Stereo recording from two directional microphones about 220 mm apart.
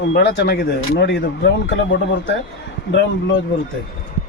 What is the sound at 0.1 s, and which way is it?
Speech, 50° left (ahead or behind).